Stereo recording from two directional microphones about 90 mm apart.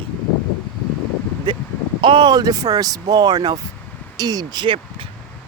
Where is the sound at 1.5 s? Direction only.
60° right (ahead or behind).